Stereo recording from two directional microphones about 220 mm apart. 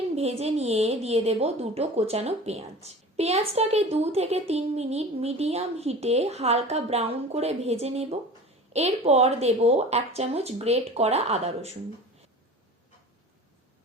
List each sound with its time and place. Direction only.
0.2 s a woman's voice: 30° right (ahead or behind)